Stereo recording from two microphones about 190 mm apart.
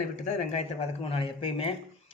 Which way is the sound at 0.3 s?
35° left (ahead or behind).